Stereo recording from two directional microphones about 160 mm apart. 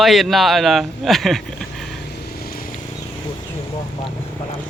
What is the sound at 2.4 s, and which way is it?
Vehicle, 65° left (ahead or behind).